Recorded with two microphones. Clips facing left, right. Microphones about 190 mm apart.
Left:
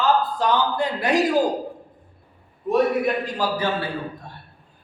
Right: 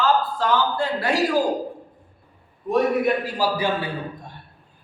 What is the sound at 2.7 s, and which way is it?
A man's voice, 5° right (ahead or behind).